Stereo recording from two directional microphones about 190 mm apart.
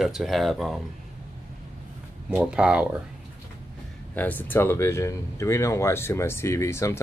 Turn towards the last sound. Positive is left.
turn(degrees=15)  # may be behind; listen again after turning